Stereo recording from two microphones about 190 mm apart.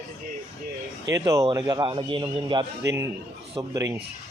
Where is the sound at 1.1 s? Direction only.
15° right (ahead or behind).